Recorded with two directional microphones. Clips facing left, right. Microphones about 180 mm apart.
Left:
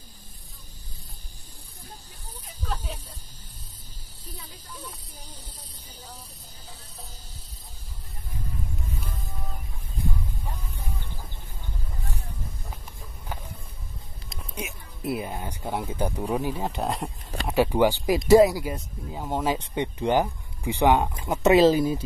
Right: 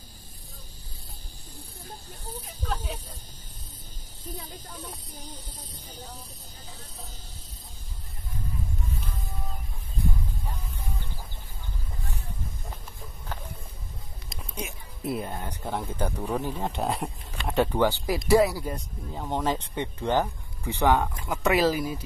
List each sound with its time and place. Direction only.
2.6 s vehicle: 10° right (ahead or behind)
4.5 s speech: 45° right (ahead or behind)
14.5 s speech: 5° left (ahead or behind); by 18.6 s 20° left (ahead or behind)
18.6 s speech: 5° left (ahead or behind); by 22.0 s 25° left (ahead or behind)